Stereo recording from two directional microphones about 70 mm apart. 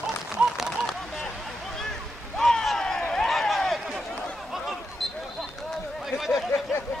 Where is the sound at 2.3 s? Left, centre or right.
Centre.